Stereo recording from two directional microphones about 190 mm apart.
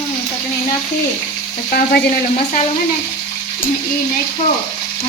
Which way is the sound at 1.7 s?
50° left (ahead or behind).